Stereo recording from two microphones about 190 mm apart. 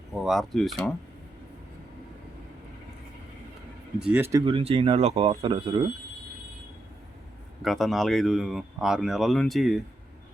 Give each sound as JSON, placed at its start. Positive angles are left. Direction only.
{"t": 0.1, "sound": "speech", "side_deg": 0}
{"t": 4.0, "sound": "speech", "side_deg": -10}
{"t": 4.4, "sound": "speech", "side_deg": -30}
{"t": 7.6, "sound": "speech", "side_deg": 0}